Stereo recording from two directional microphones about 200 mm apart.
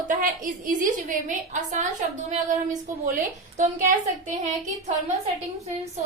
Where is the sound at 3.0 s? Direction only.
40° right (ahead or behind).